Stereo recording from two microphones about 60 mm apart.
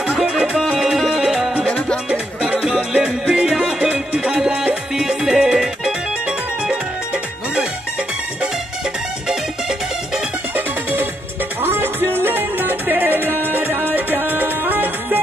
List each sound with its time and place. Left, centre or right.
0.1 s music: centre
10.5 s music: right